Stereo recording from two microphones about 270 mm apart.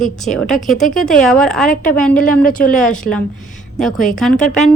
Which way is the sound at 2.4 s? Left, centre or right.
Left.